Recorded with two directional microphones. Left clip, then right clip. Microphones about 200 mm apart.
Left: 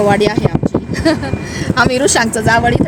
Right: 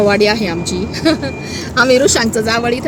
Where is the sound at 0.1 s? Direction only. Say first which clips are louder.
Right 1 dB; 10° left (ahead or behind).